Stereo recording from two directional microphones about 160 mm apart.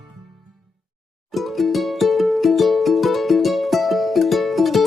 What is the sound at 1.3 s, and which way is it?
Music, centre (ahead or behind).